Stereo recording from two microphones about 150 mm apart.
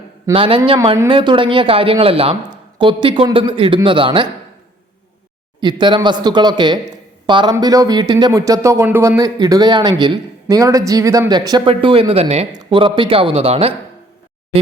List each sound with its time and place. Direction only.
0.3 s speech: 35° right (ahead or behind)
5.5 s speech: 30° right (ahead or behind)